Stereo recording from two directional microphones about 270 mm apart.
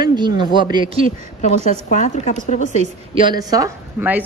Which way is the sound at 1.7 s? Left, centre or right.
Left.